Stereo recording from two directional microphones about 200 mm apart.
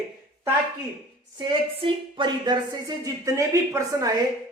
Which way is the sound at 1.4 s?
25° right (ahead or behind).